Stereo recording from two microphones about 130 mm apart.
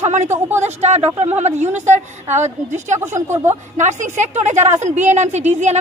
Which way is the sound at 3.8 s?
70° right (ahead or behind).